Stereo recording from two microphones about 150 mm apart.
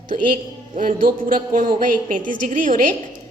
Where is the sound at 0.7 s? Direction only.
65° right (ahead or behind).